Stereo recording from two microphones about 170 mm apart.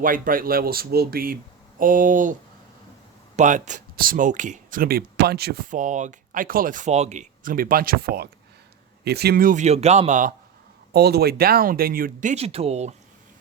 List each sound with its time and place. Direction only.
0.0 s speech: 55° right (ahead or behind)
3.3 s speech: 45° right (ahead or behind); by 5.6 s 70° right (ahead or behind)
5.7 s speech: 45° right (ahead or behind)
10.9 s speech: 70° right (ahead or behind); by 12.9 s 40° right (ahead or behind)